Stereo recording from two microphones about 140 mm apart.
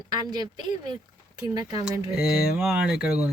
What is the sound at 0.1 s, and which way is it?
Speech, 30° right (ahead or behind).